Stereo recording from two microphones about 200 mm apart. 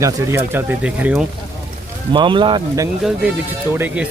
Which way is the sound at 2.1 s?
25° right (ahead or behind).